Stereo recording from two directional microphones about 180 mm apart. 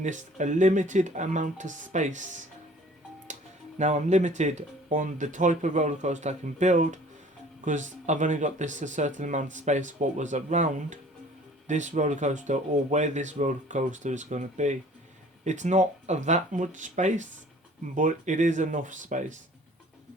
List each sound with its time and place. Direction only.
0.0 s speech: 40° right (ahead or behind)
3.3 s music: 40° right (ahead or behind)
3.8 s speech: 40° right (ahead or behind)